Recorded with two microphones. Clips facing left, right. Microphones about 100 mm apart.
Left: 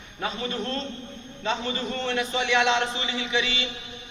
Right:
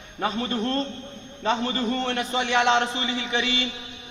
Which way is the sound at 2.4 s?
50° right (ahead or behind).